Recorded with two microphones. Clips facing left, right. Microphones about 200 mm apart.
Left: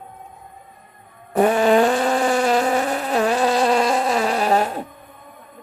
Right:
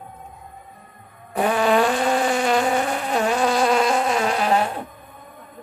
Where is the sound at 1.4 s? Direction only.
45° left (ahead or behind).